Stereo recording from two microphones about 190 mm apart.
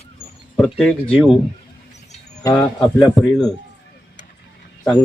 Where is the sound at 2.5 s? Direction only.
Centre (ahead or behind).